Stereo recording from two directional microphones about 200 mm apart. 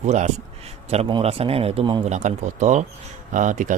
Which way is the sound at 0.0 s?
35° right (ahead or behind).